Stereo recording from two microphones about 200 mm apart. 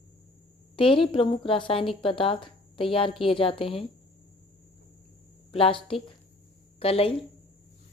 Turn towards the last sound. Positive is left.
turn(degrees=30)  # may be behind; listen again after turning